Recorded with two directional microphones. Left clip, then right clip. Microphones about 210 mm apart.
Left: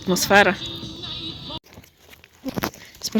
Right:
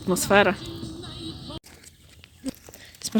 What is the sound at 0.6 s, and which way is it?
Music, 45° left (ahead or behind).